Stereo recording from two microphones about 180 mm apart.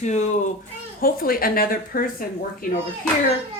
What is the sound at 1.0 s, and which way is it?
A woman's voice, 55° left (ahead or behind).